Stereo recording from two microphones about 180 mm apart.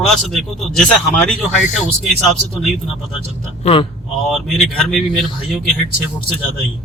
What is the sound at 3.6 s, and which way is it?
Speech, 30° left (ahead or behind).